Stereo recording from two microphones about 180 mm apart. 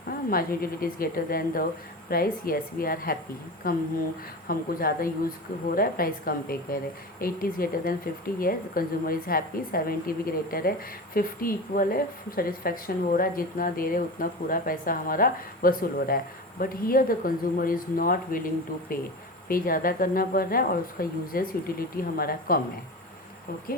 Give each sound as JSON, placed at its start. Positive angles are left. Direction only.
{"t": 0.1, "sound": "a woman's voice", "side_deg": 55}